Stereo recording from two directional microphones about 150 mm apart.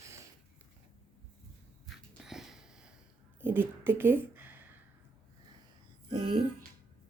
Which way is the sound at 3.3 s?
15° right (ahead or behind).